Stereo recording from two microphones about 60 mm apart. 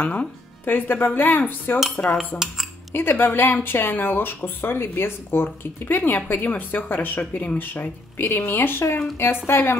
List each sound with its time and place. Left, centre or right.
0.0 s speech: left
2.1 s speech: centre
2.9 s speech: left